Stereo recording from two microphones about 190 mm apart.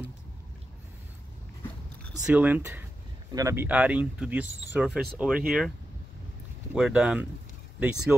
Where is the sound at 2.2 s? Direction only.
5° right (ahead or behind).